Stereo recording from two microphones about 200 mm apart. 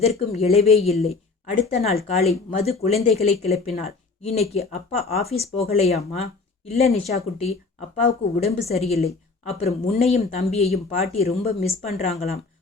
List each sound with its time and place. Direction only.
0.0 s a woman's voice: 30° left (ahead or behind)